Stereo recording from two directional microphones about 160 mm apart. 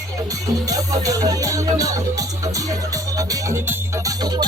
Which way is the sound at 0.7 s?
20° right (ahead or behind).